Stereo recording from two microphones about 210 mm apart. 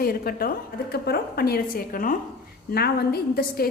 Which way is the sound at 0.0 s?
45° left (ahead or behind).